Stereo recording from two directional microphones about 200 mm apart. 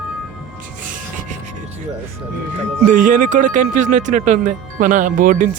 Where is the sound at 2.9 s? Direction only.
40° right (ahead or behind).